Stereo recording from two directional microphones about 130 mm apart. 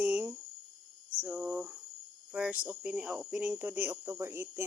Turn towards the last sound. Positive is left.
turn(degrees=-20)  # may be behind; listen again after turning